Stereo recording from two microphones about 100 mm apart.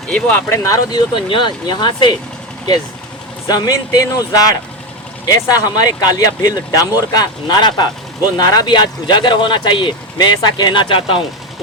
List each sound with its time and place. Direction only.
0.1 s speech: 10° left (ahead or behind)
0.4 s speech: 30° left (ahead or behind)
0.9 s speech: 50° left (ahead or behind)
3.4 s speech: 35° left (ahead or behind); by 11.2 s 60° left (ahead or behind)